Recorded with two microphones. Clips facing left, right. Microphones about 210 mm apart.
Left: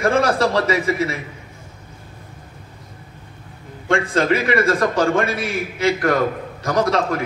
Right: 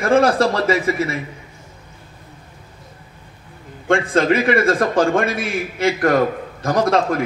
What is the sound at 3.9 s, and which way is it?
A man's voice, 55° right (ahead or behind).